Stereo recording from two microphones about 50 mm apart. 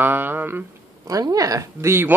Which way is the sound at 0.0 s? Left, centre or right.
Right.